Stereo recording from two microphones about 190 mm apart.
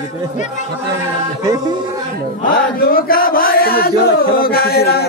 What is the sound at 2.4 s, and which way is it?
Chant, 50° left (ahead or behind).